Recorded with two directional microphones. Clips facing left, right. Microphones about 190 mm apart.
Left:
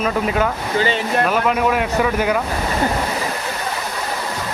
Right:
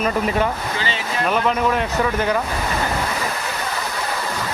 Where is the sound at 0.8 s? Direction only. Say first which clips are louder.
Left 7 dB; 50° left (ahead or behind).